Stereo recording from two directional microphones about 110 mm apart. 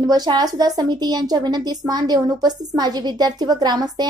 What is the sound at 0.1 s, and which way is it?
A woman's voice, 35° right (ahead or behind).